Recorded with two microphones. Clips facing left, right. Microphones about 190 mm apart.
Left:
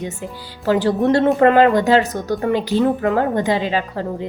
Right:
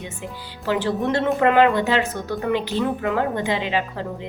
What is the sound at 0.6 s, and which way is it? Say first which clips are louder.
Speech: left 6 dB; 40° left (ahead or behind).